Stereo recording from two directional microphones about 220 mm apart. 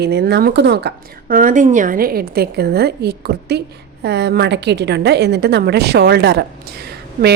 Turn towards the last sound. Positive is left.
turn(degrees=-45)  # may be behind; listen again after turning